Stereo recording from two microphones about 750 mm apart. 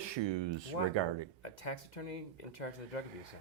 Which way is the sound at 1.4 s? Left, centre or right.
Left.